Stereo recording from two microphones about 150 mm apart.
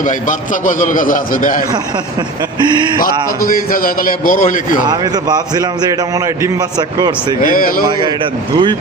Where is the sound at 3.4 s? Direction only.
75° left (ahead or behind).